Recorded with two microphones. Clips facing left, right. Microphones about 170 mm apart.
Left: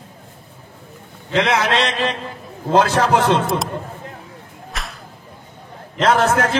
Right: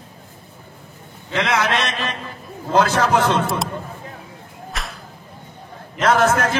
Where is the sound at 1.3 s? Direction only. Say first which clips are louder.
Left 3 dB; 25° left (ahead or behind).